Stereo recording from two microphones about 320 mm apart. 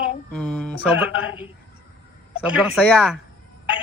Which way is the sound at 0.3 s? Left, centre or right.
Centre.